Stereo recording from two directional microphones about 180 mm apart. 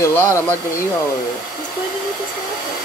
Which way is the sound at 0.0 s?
10° left (ahead or behind).